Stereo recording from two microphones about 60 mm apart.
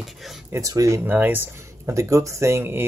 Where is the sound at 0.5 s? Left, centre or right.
Right.